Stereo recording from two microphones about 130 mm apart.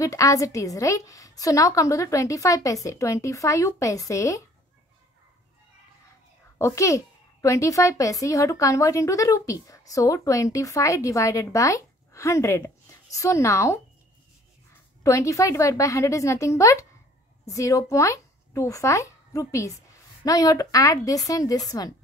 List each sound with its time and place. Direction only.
0.0 s a woman's voice: 25° left (ahead or behind)
6.6 s a woman's voice: 25° left (ahead or behind)
15.0 s a woman's voice: 25° left (ahead or behind)